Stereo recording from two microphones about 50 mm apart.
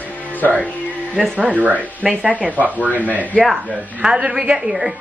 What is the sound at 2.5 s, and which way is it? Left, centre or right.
Speech, right.